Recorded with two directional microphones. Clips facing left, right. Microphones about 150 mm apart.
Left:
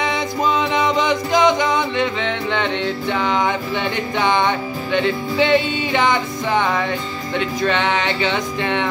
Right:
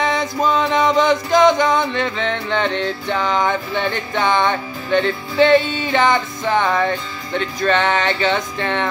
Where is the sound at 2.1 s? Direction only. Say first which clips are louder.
Right 1 dB; 45° right (ahead or behind).